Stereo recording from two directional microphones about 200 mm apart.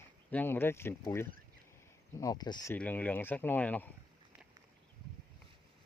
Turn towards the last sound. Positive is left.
turn(degrees=10)  # may be behind; listen again after turning